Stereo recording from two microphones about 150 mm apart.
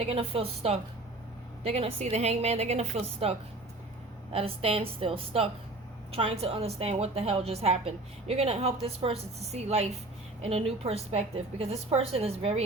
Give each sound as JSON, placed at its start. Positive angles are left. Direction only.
{"t": 0.1, "sound": "a woman's voice", "side_deg": -40}